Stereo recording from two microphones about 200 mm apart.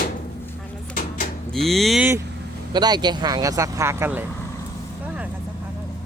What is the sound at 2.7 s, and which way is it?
Speech, 20° right (ahead or behind).